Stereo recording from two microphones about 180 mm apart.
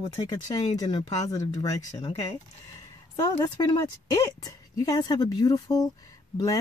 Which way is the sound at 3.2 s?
20° left (ahead or behind).